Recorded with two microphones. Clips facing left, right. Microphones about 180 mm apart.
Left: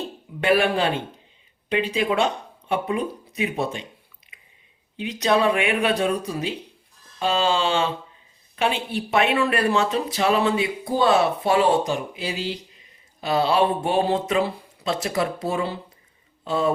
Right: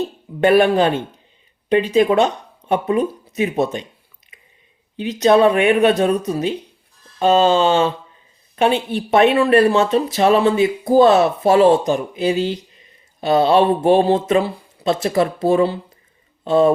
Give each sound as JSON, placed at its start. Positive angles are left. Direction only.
{"t": 0.4, "sound": "speech", "side_deg": -40}
{"t": 4.9, "sound": "speech", "side_deg": -40}